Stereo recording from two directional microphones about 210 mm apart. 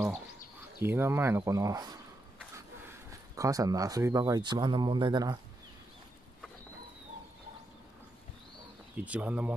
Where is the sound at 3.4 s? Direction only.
15° right (ahead or behind).